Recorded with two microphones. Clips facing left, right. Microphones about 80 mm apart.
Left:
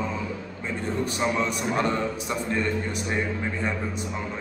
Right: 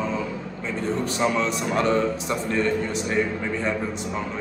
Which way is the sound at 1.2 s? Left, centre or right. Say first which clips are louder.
Right 3 dB; centre.